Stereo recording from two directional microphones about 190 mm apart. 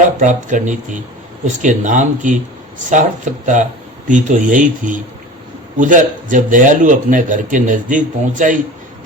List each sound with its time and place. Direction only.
0.0 s a man's voice: 40° right (ahead or behind)